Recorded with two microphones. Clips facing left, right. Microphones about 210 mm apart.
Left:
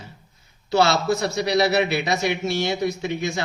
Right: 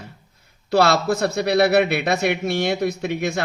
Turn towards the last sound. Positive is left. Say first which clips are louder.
# right 2 dB
turn(degrees=-60)  # may be behind; listen again after turning